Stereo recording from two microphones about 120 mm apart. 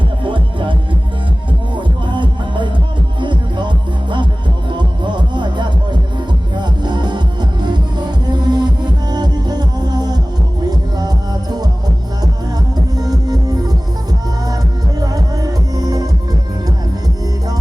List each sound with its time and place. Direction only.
0.3 s music: 45° right (ahead or behind)
12.7 s music: 30° right (ahead or behind)
15.0 s music: 30° right (ahead or behind)